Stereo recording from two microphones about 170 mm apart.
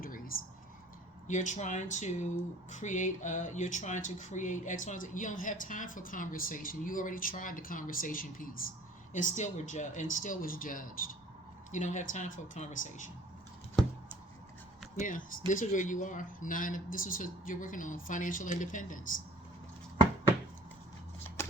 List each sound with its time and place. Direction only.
0.0 s a sound: 55° left (ahead or behind)
1.3 s speech: 45° left (ahead or behind)
15.0 s speech: 50° left (ahead or behind)